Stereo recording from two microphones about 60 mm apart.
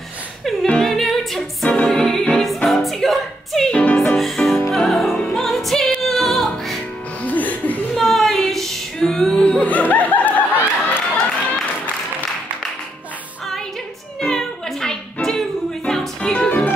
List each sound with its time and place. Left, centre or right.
0.7 s music: centre
3.7 s music: centre
4.0 s music: centre
7.2 s music: left
7.9 s music: centre
9.7 s a sound: left
14.2 s a sound: centre
15.2 s music: centre